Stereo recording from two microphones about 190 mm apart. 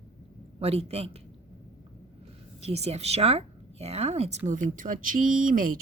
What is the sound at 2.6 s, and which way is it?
Speech, 35° right (ahead or behind).